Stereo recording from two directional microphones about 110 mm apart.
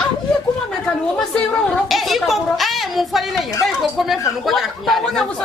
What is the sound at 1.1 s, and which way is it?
A woman's voice, 5° left (ahead or behind).